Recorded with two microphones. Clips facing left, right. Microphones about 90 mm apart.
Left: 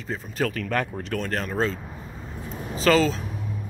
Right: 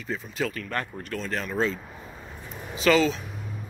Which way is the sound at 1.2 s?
45° left (ahead or behind).